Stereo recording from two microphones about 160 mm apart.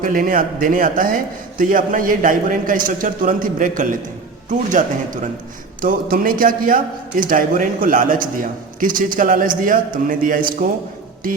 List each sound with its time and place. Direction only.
0.0 s a man's voice: 60° right (ahead or behind)